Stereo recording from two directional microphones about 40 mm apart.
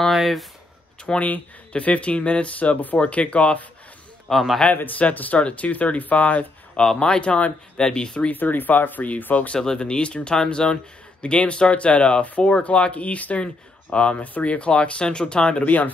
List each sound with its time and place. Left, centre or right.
0.1 s speech: centre
1.1 s speech: left
1.7 s speech: left
4.3 s speech: centre
4.9 s speech: left
6.8 s speech: centre
8.3 s speech: left
9.8 s speech: left
15.6 s speech: left